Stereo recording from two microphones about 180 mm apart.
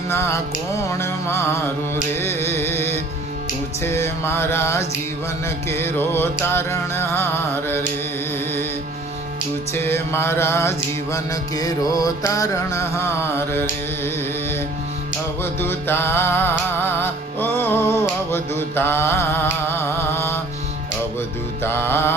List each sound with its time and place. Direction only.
0.1 s music: 15° left (ahead or behind)
9.7 s music: 15° left (ahead or behind)
15.6 s music: 10° left (ahead or behind)
21.6 s music: 15° left (ahead or behind)